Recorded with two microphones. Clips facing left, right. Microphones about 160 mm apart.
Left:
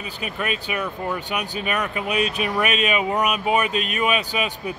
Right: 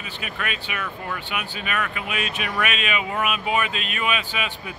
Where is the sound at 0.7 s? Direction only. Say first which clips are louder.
Left 5 dB; 25° left (ahead or behind).